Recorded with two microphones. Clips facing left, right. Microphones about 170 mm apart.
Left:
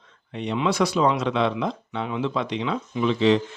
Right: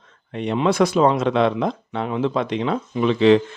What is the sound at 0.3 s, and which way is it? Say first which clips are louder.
Speech: right 4 dB; 50° right (ahead or behind).